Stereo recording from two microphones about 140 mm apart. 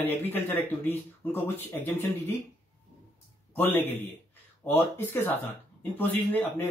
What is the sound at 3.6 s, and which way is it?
Speech, 15° left (ahead or behind).